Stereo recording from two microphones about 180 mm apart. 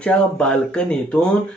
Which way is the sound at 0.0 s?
5° left (ahead or behind).